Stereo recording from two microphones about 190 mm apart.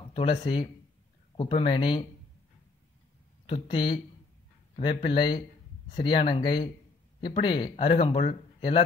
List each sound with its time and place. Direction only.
0.1 s speech: 30° left (ahead or behind)
3.4 s speech: 25° left (ahead or behind)